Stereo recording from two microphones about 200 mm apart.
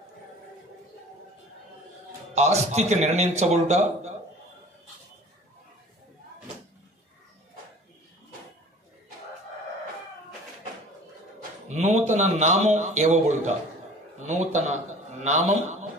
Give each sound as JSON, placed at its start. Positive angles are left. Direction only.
{"t": 2.3, "sound": "a man's voice", "side_deg": -35}
{"t": 11.6, "sound": "a man's voice", "side_deg": -35}